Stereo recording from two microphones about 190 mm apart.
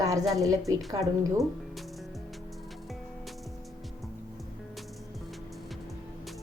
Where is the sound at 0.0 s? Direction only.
20° right (ahead or behind).